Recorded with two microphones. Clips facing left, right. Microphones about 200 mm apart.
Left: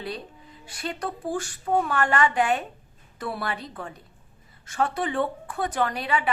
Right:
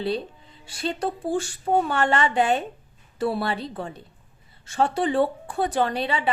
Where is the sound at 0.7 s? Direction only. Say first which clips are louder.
Right 5 dB; 30° right (ahead or behind).